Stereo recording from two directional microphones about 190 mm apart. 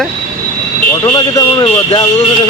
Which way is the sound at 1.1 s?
20° left (ahead or behind).